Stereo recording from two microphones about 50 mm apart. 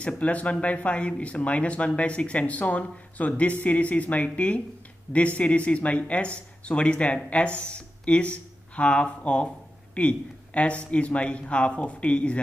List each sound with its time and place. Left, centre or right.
0.0 s a man's voice: left